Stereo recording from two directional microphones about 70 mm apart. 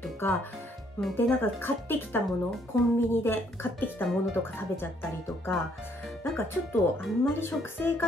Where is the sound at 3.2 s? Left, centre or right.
Left.